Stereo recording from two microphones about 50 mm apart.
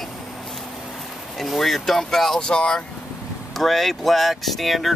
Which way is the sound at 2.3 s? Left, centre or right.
Centre.